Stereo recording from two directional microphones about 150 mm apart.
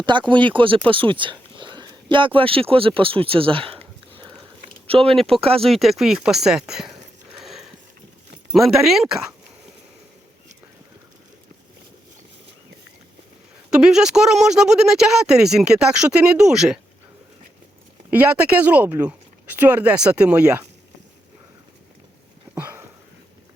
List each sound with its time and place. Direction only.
0.0 s speech: 30° right (ahead or behind)
4.9 s speech: 40° right (ahead or behind)
5.5 s speech: centre (ahead or behind)
7.4 s sniff: centre (ahead or behind)
8.5 s speech: centre (ahead or behind)
13.7 s speech: 5° right (ahead or behind)
18.1 s speech: 10° right (ahead or behind)
22.5 s a sound: 15° right (ahead or behind)